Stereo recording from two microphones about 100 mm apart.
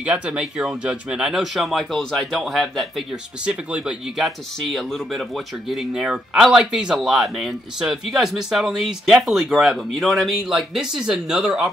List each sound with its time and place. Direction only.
0.0 s speech: 10° right (ahead or behind)
3.4 s speech: 10° right (ahead or behind)
4.2 s speech: centre (ahead or behind)